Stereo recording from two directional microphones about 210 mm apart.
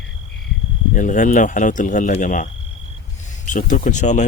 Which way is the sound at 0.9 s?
40° left (ahead or behind).